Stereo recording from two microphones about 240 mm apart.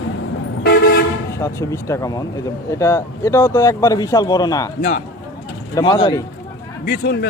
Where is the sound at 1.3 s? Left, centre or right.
Centre.